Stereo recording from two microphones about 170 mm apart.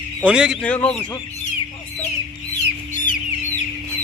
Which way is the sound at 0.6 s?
5° left (ahead or behind).